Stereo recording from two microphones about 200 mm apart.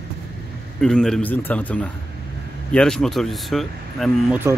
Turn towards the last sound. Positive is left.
turn(degrees=0)  # may be behind; listen again after turning